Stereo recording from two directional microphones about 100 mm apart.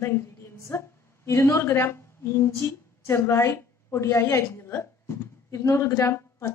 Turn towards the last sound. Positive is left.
turn(degrees=25)  # may be behind; listen again after turning